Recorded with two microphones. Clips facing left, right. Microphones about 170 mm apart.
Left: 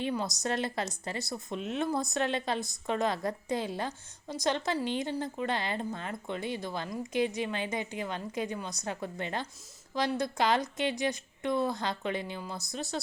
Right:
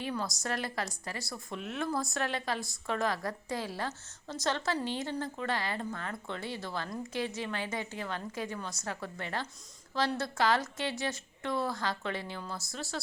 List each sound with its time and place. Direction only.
0.0 s a woman's voice: 20° left (ahead or behind)